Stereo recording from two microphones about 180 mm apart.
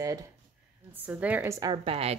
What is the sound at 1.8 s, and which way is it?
Speech, 35° right (ahead or behind).